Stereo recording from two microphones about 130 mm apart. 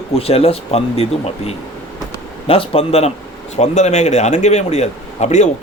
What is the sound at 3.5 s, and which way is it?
A man's voice, 60° left (ahead or behind).